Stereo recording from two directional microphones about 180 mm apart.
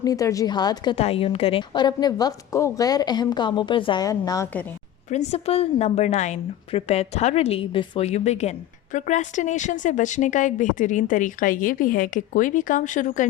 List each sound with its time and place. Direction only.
0.0 s a woman's voice: 20° left (ahead or behind)
0.9 s a woman's voice: 35° left (ahead or behind)
5.1 s a woman's voice: 35° left (ahead or behind)